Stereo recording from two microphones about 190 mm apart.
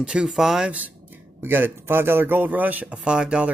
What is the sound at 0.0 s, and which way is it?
Speech, 5° right (ahead or behind).